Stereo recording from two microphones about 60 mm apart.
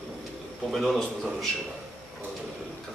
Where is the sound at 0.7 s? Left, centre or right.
Centre.